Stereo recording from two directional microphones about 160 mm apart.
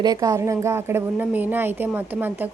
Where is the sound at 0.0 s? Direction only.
25° right (ahead or behind).